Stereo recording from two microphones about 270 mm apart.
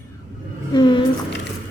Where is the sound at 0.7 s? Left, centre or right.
Centre.